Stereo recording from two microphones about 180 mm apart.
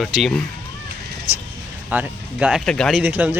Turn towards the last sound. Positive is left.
turn(degrees=-10)  # may be behind; listen again after turning